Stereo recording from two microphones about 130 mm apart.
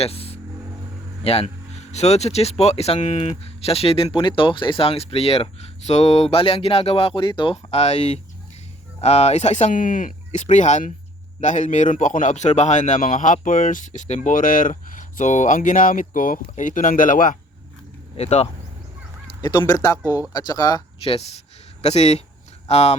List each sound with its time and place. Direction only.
0.0 s a man's voice: 50° left (ahead or behind); by 17.3 s 90° left
18.2 s speech: 55° left (ahead or behind)
19.4 s speech: 30° left (ahead or behind)
21.0 s speech: 50° left (ahead or behind)